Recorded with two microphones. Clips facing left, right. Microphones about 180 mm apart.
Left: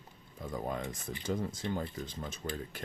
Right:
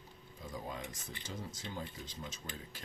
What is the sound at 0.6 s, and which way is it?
Speech, 55° left (ahead or behind).